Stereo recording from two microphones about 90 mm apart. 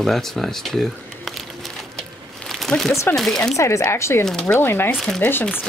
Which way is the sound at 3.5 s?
35° left (ahead or behind).